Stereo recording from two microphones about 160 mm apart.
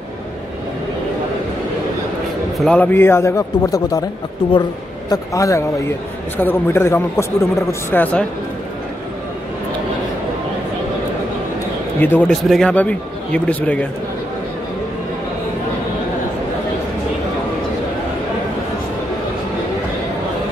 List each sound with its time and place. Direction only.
2.6 s a man's voice: 10° left (ahead or behind)
5.1 s a man's voice: 20° left (ahead or behind)
12.0 s a man's voice: 10° left (ahead or behind)